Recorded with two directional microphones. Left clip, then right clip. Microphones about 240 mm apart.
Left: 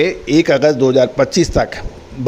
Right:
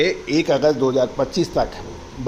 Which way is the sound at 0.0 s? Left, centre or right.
Left.